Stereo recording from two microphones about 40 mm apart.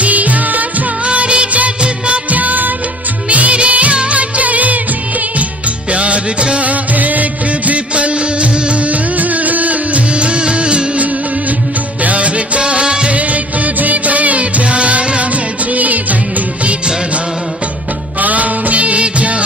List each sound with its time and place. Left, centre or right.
0.0 s music of bollywood: right
2.3 s music: right
5.9 s music of bollywood: right
9.2 s music: right
13.1 s music: right
18.2 s music: right